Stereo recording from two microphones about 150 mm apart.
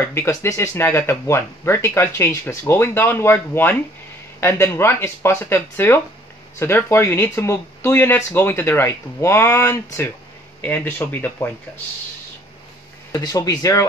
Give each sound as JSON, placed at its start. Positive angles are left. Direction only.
{"t": 0.1, "sound": "speech", "side_deg": 15}
{"t": 13.1, "sound": "speech", "side_deg": 25}